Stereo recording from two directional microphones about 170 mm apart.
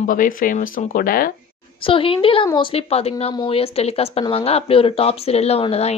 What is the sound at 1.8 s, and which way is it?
A woman's voice, 30° left (ahead or behind).